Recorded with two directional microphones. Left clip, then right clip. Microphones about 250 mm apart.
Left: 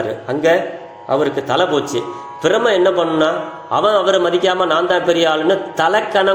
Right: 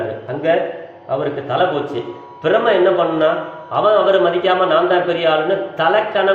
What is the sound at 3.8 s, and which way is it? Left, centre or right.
A man's voice, left.